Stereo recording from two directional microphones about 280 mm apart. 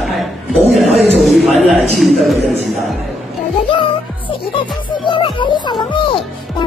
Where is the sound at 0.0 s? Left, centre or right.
Centre.